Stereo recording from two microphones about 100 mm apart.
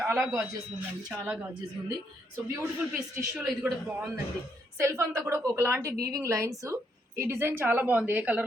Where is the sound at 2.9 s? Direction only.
10° right (ahead or behind).